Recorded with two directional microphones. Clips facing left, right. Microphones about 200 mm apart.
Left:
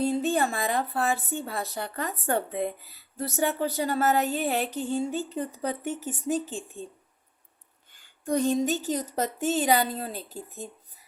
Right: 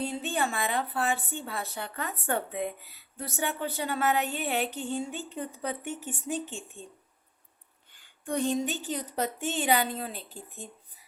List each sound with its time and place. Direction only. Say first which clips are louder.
0.0 s speech: left 6 dB; 40° left (ahead or behind)
7.9 s speech: left 4 dB; 40° left (ahead or behind)